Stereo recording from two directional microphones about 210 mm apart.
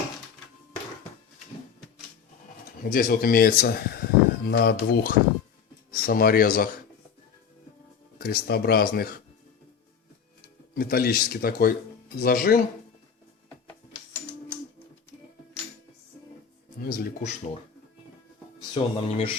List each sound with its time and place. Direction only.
2.8 s speech: 45° left (ahead or behind)
8.2 s speech: 50° left (ahead or behind)
10.8 s speech: 45° left (ahead or behind)
16.8 s a sound: 40° left (ahead or behind)
18.7 s speech: 30° left (ahead or behind)